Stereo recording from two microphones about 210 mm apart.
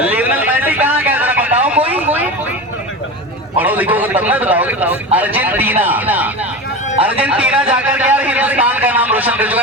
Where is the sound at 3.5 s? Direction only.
10° right (ahead or behind).